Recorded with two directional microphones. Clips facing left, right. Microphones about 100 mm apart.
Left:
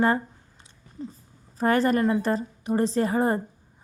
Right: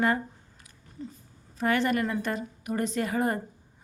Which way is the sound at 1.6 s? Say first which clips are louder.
Left 4 dB; 35° left (ahead or behind).